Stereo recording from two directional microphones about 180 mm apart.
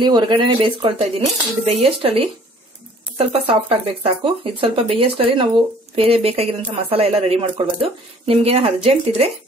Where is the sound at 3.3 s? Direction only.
30° right (ahead or behind).